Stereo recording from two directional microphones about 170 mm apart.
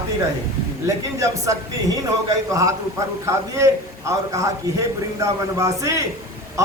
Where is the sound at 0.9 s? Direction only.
20° right (ahead or behind).